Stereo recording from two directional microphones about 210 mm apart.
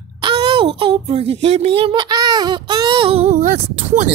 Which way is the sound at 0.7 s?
25° right (ahead or behind).